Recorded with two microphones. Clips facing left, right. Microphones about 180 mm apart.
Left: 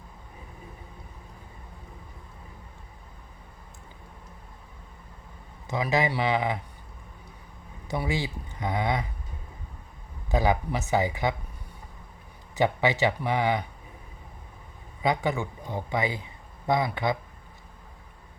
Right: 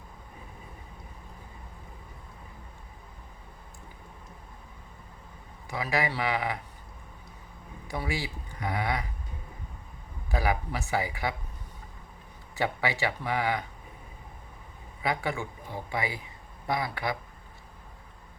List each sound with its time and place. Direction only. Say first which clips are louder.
5.6 s speech: left 4 dB; 20° left (ahead or behind)
7.9 s speech: left 4 dB; 20° left (ahead or behind)
10.2 s speech: left 4 dB; 20° left (ahead or behind)
12.5 s speech: left 5 dB; 20° left (ahead or behind)
15.0 s a man's voice: left 4 dB; 20° left (ahead or behind)